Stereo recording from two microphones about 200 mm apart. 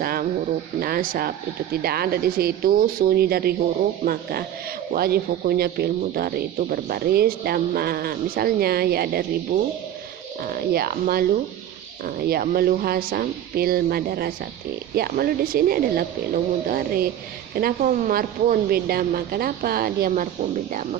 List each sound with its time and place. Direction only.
0.0 s speech: 45° right (ahead or behind)
9.5 s speech: 40° right (ahead or behind)